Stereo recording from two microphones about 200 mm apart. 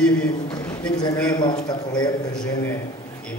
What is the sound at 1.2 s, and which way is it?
Speech, 20° left (ahead or behind).